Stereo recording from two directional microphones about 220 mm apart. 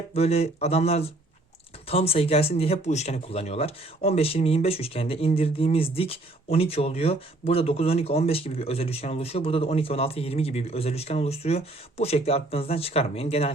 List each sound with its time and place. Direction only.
0.1 s speech: 30° left (ahead or behind)